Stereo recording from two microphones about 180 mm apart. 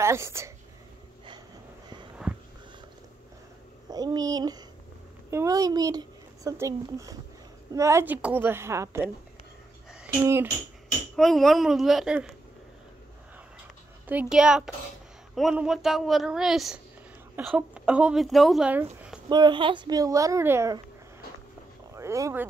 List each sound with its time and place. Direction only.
0.0 s a woman's voice: 15° right (ahead or behind)
2.3 s a sound: 5° right (ahead or behind)
3.9 s a woman's voice: 20° right (ahead or behind)
10.2 s a woman's voice: 15° right (ahead or behind)
11.1 s a woman's voice: centre (ahead or behind)
14.0 s a woman's voice: 5° right (ahead or behind)
19.2 s speech: 25° right (ahead or behind)
21.9 s speech: 15° right (ahead or behind)